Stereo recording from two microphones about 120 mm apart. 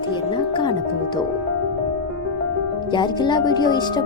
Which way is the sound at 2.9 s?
40° left (ahead or behind).